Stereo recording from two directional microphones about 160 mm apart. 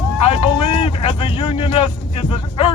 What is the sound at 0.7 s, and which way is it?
Speech, 35° left (ahead or behind).